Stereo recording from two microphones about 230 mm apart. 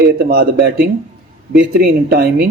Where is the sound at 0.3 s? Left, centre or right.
Right.